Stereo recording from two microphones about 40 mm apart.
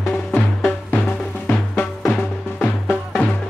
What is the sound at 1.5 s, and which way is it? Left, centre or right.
Music, left.